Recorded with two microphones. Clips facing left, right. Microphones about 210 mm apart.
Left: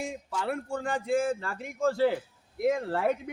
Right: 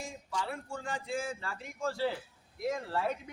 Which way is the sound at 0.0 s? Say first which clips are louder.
Left 5 dB; 60° left (ahead or behind).